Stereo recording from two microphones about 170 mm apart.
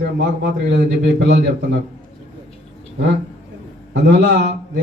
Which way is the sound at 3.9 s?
90° right.